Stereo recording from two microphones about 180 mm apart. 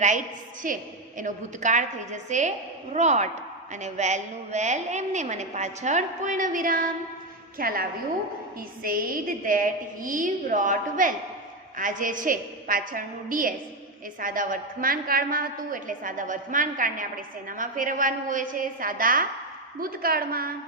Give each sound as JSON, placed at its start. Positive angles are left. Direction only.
{"t": 0.6, "sound": "a woman's voice", "side_deg": -50}
{"t": 8.8, "sound": "a woman's voice", "side_deg": -55}